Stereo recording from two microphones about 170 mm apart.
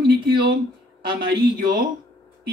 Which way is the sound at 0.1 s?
65° right (ahead or behind).